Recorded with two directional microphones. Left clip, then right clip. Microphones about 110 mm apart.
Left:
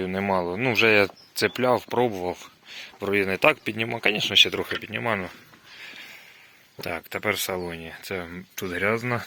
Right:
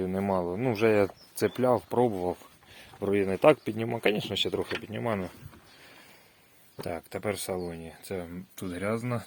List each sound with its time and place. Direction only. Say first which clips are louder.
0.0 s speech: left 4 dB; 15° right (ahead or behind); by 4.3 s 35° right (ahead or behind)
4.3 s speech: left 10 dB; 20° right (ahead or behind)
6.8 s speech: left 6 dB; 20° right (ahead or behind)
7.5 s speech: left 4 dB; 5° right (ahead or behind)